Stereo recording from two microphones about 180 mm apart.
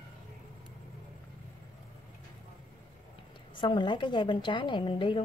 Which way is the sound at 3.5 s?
25° left (ahead or behind).